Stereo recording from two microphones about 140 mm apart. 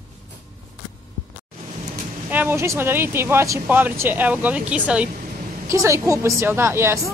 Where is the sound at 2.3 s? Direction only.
15° right (ahead or behind).